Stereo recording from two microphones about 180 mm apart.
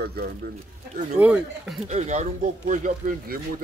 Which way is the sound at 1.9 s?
40° right (ahead or behind).